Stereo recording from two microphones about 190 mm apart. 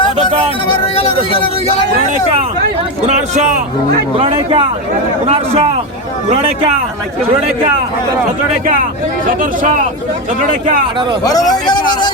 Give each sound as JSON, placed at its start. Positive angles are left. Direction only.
{"t": 3.1, "sound": "a man's voice", "side_deg": -40}
{"t": 9.2, "sound": "speech", "side_deg": -45}
{"t": 11.2, "sound": "a man's voice", "side_deg": 20}